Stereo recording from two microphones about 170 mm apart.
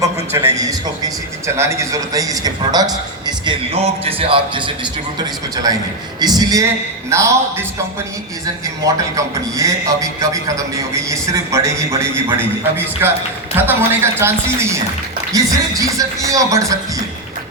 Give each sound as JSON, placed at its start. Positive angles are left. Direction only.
{"t": 0.0, "sound": "a man's voice", "side_deg": -15}
{"t": 8.6, "sound": "a man's voice", "side_deg": -20}